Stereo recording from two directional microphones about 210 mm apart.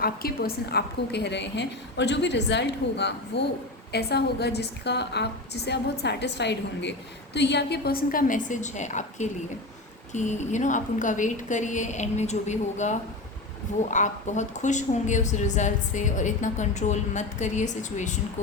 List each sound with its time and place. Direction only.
0.0 s a woman's voice: 45° left (ahead or behind)